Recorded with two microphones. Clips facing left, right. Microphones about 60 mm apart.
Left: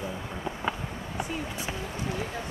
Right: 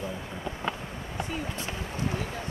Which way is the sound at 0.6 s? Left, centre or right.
Centre.